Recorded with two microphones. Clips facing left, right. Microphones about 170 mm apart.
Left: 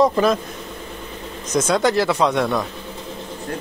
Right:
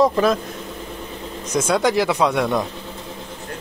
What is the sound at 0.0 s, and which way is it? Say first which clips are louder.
Speech: even; centre (ahead or behind).